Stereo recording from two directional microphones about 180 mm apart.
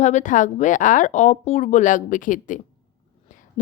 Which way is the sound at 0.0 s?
40° left (ahead or behind).